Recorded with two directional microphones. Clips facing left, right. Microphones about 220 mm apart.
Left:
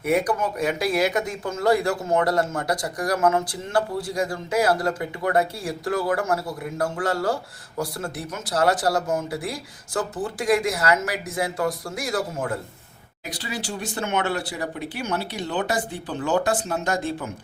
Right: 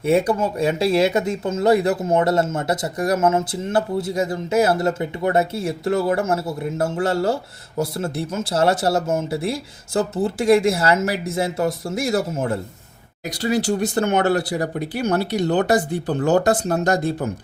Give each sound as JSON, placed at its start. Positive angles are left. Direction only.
{"t": 0.0, "sound": "speech", "side_deg": -25}
{"t": 13.3, "sound": "speech", "side_deg": -40}